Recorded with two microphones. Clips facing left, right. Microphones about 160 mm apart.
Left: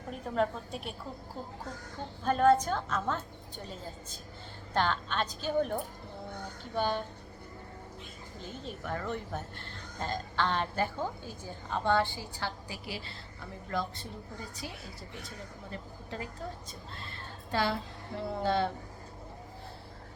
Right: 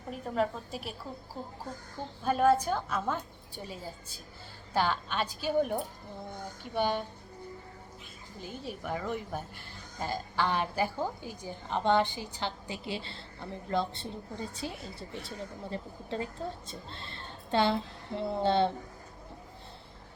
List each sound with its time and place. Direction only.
0.1 s a woman's voice: 5° right (ahead or behind)
2.2 s speech: 5° right (ahead or behind)
8.4 s speech: 10° right (ahead or behind); by 14.7 s 25° right (ahead or behind)
15.7 s a woman's voice: 30° right (ahead or behind)